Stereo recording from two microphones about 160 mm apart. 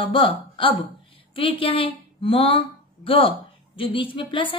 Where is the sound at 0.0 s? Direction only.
30° left (ahead or behind).